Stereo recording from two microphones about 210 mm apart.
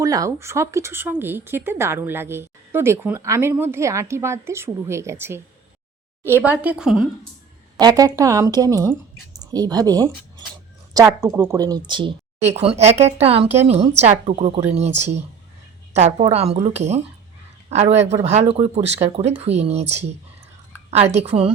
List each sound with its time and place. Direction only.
0.0 s speech: 15° right (ahead or behind)
7.8 s a woman's voice: 20° right (ahead or behind)